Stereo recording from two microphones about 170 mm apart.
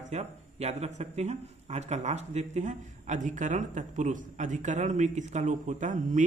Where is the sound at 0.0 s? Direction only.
40° right (ahead or behind).